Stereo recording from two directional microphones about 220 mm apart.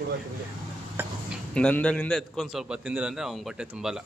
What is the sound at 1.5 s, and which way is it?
A man's voice, 5° left (ahead or behind).